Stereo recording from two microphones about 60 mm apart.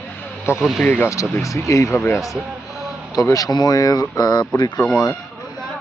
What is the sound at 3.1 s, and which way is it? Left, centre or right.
Speech, left.